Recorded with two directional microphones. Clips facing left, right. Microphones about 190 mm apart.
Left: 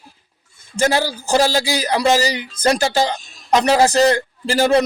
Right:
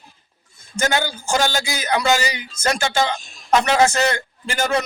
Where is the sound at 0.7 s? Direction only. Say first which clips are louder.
Left 4 dB; 30° left (ahead or behind).